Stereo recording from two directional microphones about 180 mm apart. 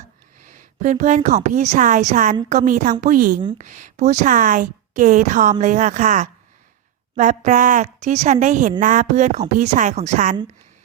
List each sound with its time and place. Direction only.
0.4 s a woman's voice: 45° right (ahead or behind)